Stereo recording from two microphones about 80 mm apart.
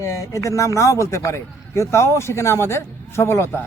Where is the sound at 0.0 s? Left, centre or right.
Left.